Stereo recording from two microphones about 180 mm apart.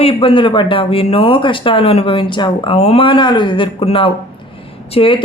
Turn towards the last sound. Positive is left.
turn(degrees=30)  # may be behind; listen again after turning